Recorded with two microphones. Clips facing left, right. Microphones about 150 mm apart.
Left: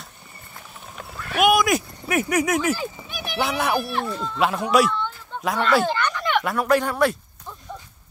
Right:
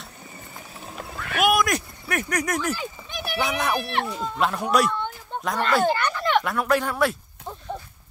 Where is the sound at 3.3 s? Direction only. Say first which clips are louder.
Left 2 dB; 5° left (ahead or behind).